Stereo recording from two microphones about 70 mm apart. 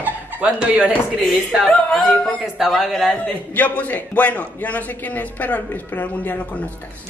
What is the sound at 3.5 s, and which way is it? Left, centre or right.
A man's voice, left.